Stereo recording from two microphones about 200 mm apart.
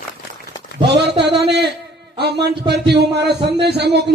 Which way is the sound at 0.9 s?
55° right (ahead or behind).